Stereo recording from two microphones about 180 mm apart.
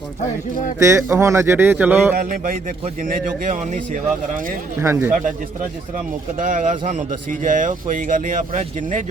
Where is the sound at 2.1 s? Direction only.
50° right (ahead or behind).